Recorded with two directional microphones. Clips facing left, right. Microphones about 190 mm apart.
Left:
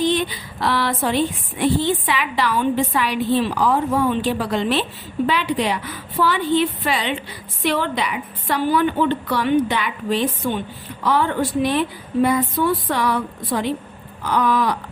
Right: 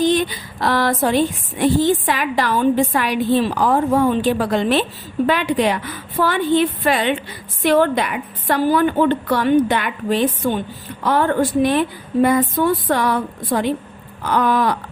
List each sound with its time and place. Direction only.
0.0 s speech: 45° right (ahead or behind)